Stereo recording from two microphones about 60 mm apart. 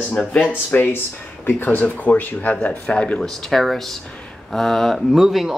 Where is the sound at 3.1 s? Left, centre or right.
Centre.